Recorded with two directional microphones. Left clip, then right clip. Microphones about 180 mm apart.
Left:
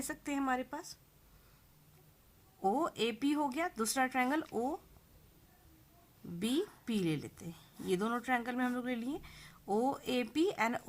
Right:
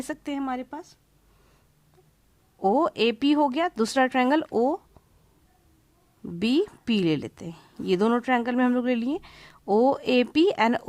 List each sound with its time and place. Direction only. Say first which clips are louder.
0.3 s speech: right 3 dB; 30° right (ahead or behind)
2.6 s speech: right 11 dB; 35° right (ahead or behind)
3.0 s speech: right 12 dB; 50° right (ahead or behind)
4.4 s speech: right 13 dB; 35° right (ahead or behind)
6.4 s speech: right 11 dB; 50° right (ahead or behind)